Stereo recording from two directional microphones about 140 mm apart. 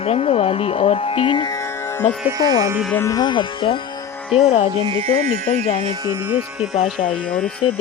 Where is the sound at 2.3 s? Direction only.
25° right (ahead or behind).